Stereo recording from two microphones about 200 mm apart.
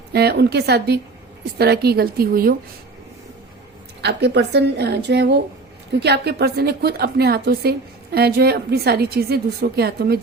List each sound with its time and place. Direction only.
0.1 s a woman's voice: 55° right (ahead or behind)
4.0 s a woman's voice: 55° right (ahead or behind)